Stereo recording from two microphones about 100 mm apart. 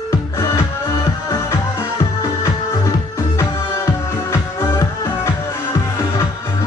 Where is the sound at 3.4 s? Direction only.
25° left (ahead or behind).